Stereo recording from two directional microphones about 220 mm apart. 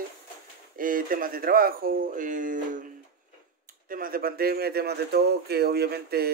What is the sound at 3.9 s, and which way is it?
Speech, 40° right (ahead or behind).